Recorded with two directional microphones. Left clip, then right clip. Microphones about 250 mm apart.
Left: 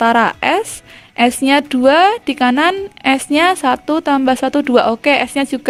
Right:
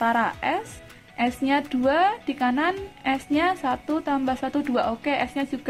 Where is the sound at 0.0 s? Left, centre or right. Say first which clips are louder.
Left 10 dB; left.